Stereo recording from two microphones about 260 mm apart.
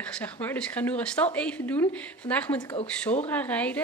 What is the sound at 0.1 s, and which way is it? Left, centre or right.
A woman's voice, centre.